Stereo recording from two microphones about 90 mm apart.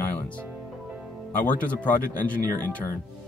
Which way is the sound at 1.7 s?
15° left (ahead or behind).